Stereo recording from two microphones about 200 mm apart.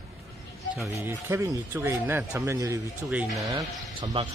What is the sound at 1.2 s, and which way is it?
Speech, 10° right (ahead or behind).